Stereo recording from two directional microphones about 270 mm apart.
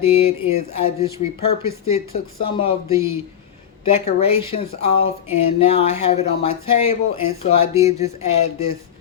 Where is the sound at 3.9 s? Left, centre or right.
Left.